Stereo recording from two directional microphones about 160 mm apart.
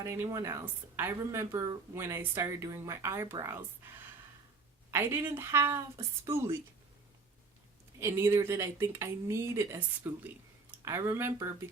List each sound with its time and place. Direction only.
0.0 s speech: 20° right (ahead or behind)
4.9 s speech: 15° right (ahead or behind)
7.9 s speech: 15° right (ahead or behind)